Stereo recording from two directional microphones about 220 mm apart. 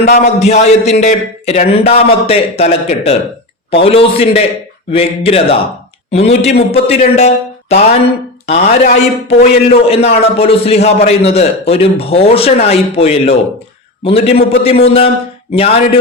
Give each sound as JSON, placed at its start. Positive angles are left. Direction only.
{"t": 0.3, "sound": "a man's voice", "side_deg": 30}